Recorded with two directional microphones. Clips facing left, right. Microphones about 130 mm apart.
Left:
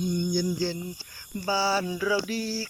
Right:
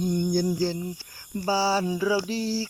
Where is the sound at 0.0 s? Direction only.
45° right (ahead or behind).